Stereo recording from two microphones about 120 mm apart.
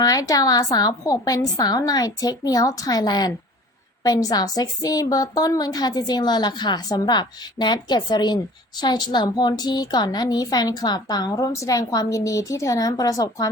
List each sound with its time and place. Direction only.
0.0 s a woman's voice: 30° left (ahead or behind)